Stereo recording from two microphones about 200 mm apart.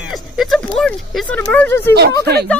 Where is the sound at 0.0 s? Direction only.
Centre (ahead or behind).